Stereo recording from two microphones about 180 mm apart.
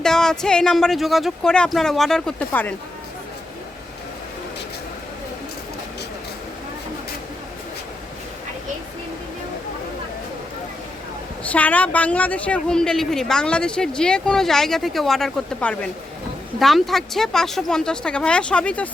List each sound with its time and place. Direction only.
0.0 s a woman's voice: 5° left (ahead or behind)
11.4 s a woman's voice: 10° left (ahead or behind)